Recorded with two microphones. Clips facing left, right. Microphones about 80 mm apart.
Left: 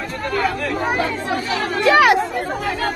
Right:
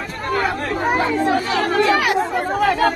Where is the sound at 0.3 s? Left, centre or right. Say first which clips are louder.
Right 1 dB; right.